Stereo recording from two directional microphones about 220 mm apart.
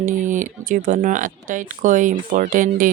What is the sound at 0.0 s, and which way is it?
A woman's voice, 35° right (ahead or behind).